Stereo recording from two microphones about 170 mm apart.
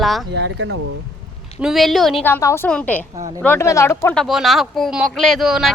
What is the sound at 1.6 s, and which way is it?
Speech, centre (ahead or behind).